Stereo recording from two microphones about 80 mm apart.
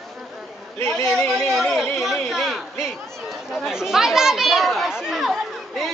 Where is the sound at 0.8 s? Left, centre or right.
Left.